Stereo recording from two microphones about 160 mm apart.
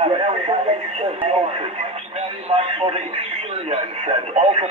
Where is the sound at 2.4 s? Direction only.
40° right (ahead or behind).